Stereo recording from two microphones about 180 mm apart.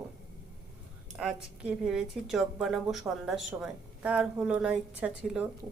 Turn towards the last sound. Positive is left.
turn(degrees=-5)  # may be behind; listen again after turning